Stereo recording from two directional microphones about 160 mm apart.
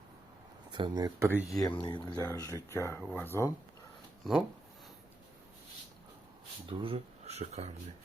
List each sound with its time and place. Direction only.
0.7 s speech: 25° right (ahead or behind)
1.8 s speech: 25° left (ahead or behind)
4.2 s speech: centre (ahead or behind)
6.7 s speech: 35° right (ahead or behind)